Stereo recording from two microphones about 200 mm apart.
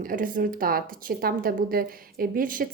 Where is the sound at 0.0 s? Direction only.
45° right (ahead or behind).